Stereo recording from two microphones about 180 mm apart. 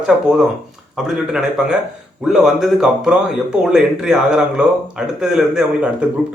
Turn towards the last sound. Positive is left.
turn(degrees=-5)  # may be behind; listen again after turning